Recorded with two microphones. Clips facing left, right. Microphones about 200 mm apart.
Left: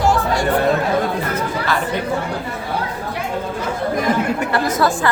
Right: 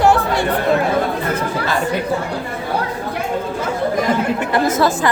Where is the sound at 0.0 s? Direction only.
65° right (ahead or behind).